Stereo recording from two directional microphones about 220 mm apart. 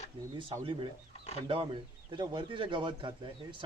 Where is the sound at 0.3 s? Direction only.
20° right (ahead or behind).